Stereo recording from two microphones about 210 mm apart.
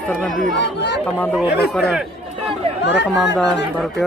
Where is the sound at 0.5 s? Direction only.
55° left (ahead or behind).